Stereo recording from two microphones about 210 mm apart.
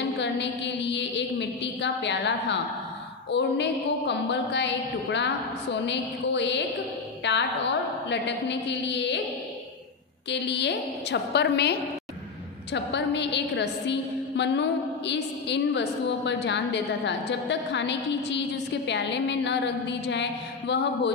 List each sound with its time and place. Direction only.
0.2 s a woman's voice: 55° left (ahead or behind)
10.3 s a woman's voice: 55° left (ahead or behind)
12.7 s a woman's voice: 55° left (ahead or behind)